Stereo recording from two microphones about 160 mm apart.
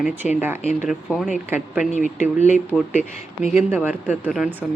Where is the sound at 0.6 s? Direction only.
45° left (ahead or behind).